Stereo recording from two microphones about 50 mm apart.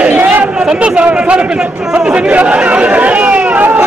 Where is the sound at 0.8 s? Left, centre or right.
Right.